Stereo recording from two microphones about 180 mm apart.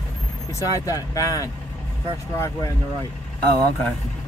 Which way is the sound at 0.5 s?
20° left (ahead or behind).